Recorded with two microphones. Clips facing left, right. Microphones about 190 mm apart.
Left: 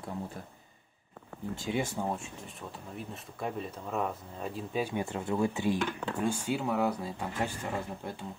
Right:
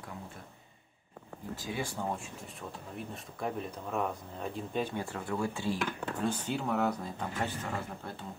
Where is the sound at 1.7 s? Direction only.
25° left (ahead or behind).